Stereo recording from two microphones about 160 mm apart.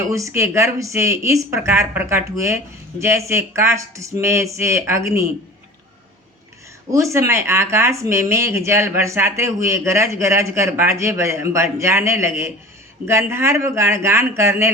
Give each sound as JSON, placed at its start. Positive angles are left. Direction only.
{"t": 0.1, "sound": "speech", "side_deg": -20}
{"t": 6.9, "sound": "speech", "side_deg": -20}